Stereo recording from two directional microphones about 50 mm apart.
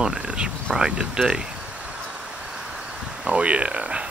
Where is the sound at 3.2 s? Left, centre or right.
Right.